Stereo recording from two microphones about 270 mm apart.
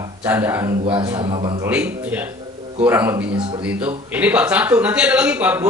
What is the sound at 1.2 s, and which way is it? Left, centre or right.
Speech, centre.